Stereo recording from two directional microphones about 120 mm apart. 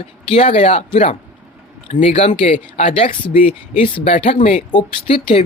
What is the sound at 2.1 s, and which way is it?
Speech, 60° left (ahead or behind).